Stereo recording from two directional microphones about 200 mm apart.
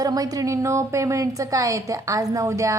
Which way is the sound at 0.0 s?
20° right (ahead or behind).